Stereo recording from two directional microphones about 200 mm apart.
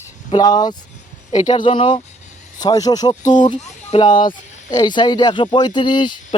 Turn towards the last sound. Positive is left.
turn(degrees=20)  # may be behind; listen again after turning